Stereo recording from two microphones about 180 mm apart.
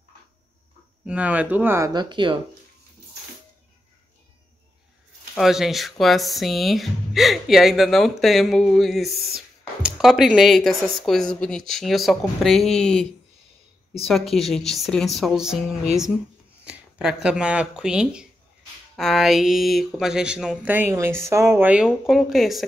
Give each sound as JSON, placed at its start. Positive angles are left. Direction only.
{"t": 1.0, "sound": "speech", "side_deg": -10}
{"t": 5.3, "sound": "speech", "side_deg": 0}
{"t": 14.0, "sound": "speech", "side_deg": 0}
{"t": 16.6, "sound": "speech", "side_deg": -5}